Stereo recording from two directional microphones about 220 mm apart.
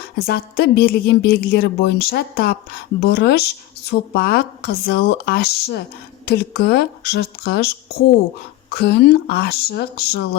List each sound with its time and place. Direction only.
0.2 s a woman's voice: 45° left (ahead or behind)